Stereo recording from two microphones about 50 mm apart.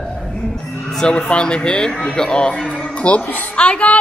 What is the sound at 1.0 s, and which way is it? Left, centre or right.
A woman's voice, centre.